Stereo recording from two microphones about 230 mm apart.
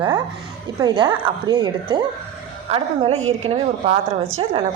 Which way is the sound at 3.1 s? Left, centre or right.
Right.